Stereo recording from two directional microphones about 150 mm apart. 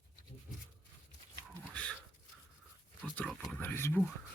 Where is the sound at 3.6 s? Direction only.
15° left (ahead or behind).